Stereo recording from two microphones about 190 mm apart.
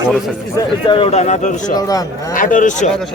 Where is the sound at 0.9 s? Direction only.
30° left (ahead or behind).